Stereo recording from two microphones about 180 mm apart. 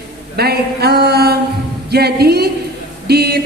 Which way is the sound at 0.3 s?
60° right (ahead or behind).